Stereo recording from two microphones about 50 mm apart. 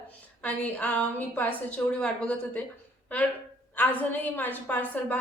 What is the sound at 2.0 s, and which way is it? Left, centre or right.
Speech, left.